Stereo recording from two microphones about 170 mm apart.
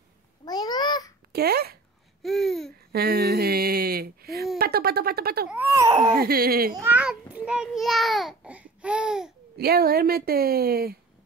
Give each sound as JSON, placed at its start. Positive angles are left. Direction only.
{"t": 0.5, "sound": "babbling", "side_deg": 25}
{"t": 1.3, "sound": "speech", "side_deg": -65}
{"t": 2.2, "sound": "babbling", "side_deg": 0}
{"t": 2.9, "sound": "speech", "side_deg": -65}
{"t": 4.3, "sound": "a sound", "side_deg": 0}
{"t": 4.6, "sound": "a woman's voice", "side_deg": -65}
{"t": 5.5, "sound": "speech", "side_deg": -10}
{"t": 6.1, "sound": "a woman's voice", "side_deg": -65}
{"t": 6.7, "sound": "a child's voice", "side_deg": -10}
{"t": 9.6, "sound": "a woman's voice", "side_deg": -65}